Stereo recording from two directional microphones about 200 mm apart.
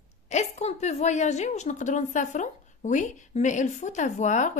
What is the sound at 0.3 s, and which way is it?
A woman's voice, 35° left (ahead or behind).